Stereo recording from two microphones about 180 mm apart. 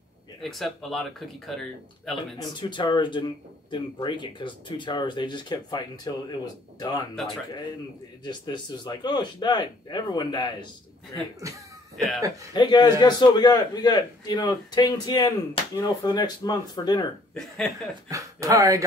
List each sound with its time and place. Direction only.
0.4 s speech: centre (ahead or behind)
2.3 s speech: 25° left (ahead or behind)
8.2 s speech: 25° left (ahead or behind)
11.4 s speech: 20° right (ahead or behind)
12.5 s speech: 25° left (ahead or behind)
17.3 s speech: 5° left (ahead or behind)
18.0 s speech: 20° right (ahead or behind)